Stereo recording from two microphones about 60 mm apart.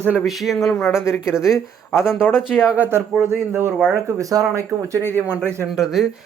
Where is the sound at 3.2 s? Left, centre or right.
Right.